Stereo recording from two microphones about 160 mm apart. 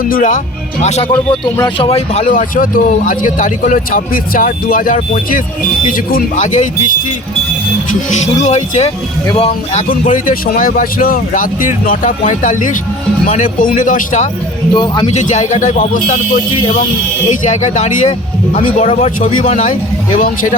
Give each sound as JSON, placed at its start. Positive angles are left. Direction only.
{"t": 0.0, "sound": "a man's voice", "side_deg": 60}
{"t": 0.8, "sound": "a man's voice", "side_deg": 45}
{"t": 8.1, "sound": "speech", "side_deg": 45}
{"t": 9.9, "sound": "a man's voice", "side_deg": 60}
{"t": 14.7, "sound": "speech", "side_deg": 30}
{"t": 15.1, "sound": "speech", "side_deg": 50}
{"t": 17.4, "sound": "a man's voice", "side_deg": 50}